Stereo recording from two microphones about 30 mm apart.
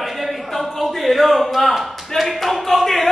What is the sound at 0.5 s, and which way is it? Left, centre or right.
Speech, centre.